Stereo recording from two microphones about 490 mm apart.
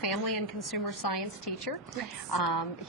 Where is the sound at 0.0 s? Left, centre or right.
Left.